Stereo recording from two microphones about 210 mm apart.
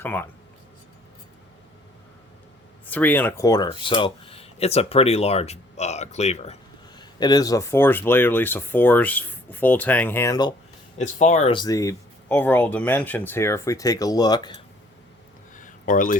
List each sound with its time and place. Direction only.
0.0 s speech: 10° left (ahead or behind)
2.8 s speech: 10° left (ahead or behind); by 6.6 s 30° left (ahead or behind)
7.0 s speech: 20° left (ahead or behind)
10.9 s speech: 35° left (ahead or behind)
11.5 s speech: 15° left (ahead or behind)
15.5 s a sound: 40° left (ahead or behind)